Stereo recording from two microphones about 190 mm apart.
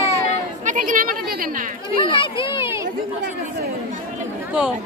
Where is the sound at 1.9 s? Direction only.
25° left (ahead or behind).